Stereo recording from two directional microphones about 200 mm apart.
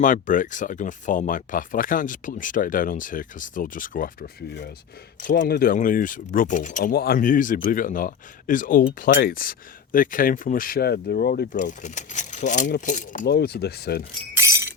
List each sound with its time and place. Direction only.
0.0 s speech: 40° left (ahead or behind)
13.2 s speech: 55° left (ahead or behind)
14.3 s glass: 15° right (ahead or behind)